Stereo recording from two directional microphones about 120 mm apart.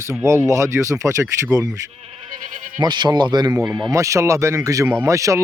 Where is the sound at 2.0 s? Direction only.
60° right (ahead or behind); by 2.8 s 90° right.